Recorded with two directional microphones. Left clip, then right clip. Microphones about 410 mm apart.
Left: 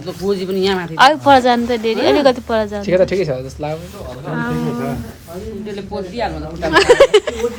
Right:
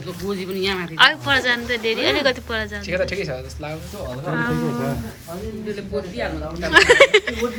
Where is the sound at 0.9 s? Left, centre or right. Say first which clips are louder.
Left 6 dB; centre.